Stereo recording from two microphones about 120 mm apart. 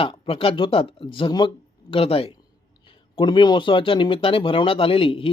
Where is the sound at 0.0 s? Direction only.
45° left (ahead or behind).